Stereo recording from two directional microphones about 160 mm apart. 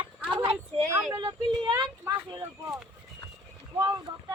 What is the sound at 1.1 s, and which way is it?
Speech, 20° right (ahead or behind).